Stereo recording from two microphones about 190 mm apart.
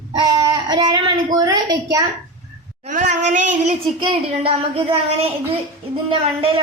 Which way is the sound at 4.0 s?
25° right (ahead or behind).